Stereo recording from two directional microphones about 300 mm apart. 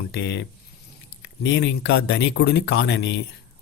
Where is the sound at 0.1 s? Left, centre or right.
Left.